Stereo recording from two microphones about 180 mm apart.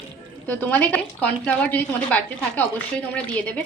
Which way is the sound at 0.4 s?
10° left (ahead or behind).